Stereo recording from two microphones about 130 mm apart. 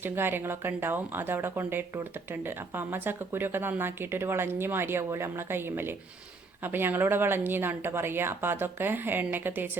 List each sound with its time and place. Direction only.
0.0 s a woman's voice: 15° right (ahead or behind)